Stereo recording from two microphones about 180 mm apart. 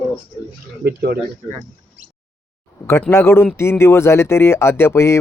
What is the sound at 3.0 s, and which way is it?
Speech, 10° left (ahead or behind).